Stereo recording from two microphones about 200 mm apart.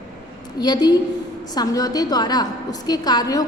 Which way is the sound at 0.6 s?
20° left (ahead or behind).